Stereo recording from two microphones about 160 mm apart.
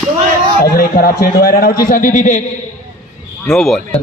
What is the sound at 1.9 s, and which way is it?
Speech, 55° left (ahead or behind).